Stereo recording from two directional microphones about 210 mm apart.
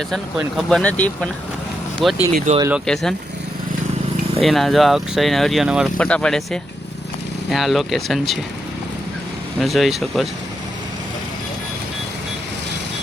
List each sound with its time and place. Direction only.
0.1 s speech: centre (ahead or behind)
2.6 s speech: 10° right (ahead or behind)
2.8 s speech: centre (ahead or behind)
4.4 s speech: centre (ahead or behind)
9.6 s speech: centre (ahead or behind)